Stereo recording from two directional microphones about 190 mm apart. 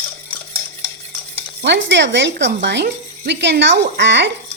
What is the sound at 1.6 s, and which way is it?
Speech, 70° right (ahead or behind).